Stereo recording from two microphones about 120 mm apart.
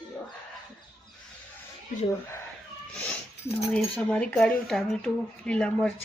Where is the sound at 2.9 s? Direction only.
10° left (ahead or behind).